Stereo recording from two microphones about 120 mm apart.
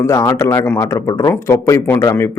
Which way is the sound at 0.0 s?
25° left (ahead or behind).